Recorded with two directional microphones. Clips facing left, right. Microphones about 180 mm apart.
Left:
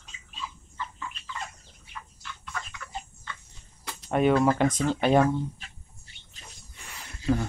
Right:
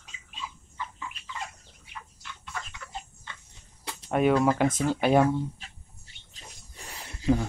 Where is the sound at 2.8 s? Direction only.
25° right (ahead or behind).